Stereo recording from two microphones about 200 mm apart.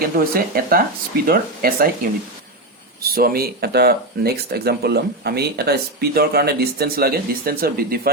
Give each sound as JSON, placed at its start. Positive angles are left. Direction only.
{"t": 0.3, "sound": "speech", "side_deg": -45}
{"t": 3.0, "sound": "speech", "side_deg": -50}